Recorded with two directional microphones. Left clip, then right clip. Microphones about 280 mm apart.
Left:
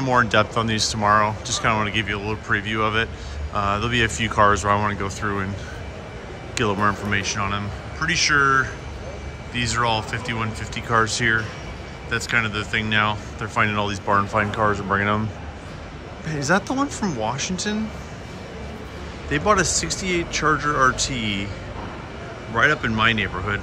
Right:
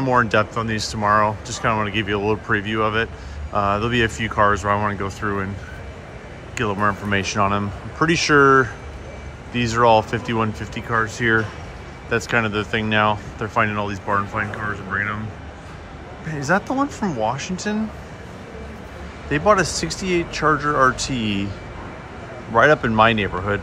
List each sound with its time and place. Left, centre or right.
0.0 s speech: centre
6.5 s speech: centre
7.2 s speech: centre
16.3 s speech: centre
19.3 s speech: centre
22.5 s speech: centre